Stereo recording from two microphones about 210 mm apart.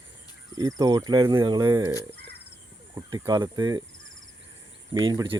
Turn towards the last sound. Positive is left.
turn(degrees=-20)  # may be behind; listen again after turning